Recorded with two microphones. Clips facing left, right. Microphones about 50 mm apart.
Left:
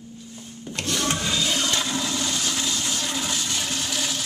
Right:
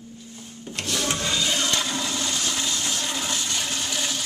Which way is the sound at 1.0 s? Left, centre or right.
Centre.